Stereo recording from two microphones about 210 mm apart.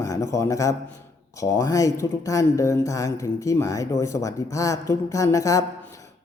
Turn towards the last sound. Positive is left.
turn(degrees=15)  # may be behind; listen again after turning